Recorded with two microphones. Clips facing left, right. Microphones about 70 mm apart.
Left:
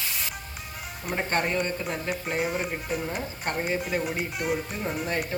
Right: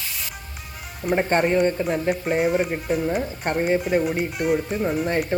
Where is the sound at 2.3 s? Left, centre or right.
Centre.